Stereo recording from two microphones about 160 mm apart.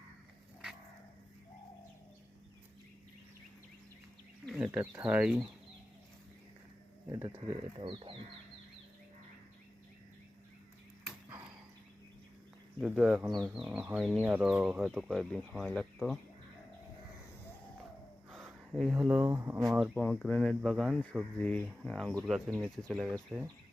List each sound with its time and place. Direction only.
4.4 s a sound: 5° right (ahead or behind)
4.9 s speech: 10° right (ahead or behind)
7.1 s speech: 25° right (ahead or behind)
12.8 s speech: 5° right (ahead or behind)
18.4 s speech: centre (ahead or behind)
19.5 s speech: 5° right (ahead or behind)
20.0 s speech: 5° left (ahead or behind)